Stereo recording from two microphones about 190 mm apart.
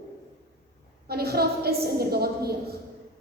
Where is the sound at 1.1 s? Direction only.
55° right (ahead or behind).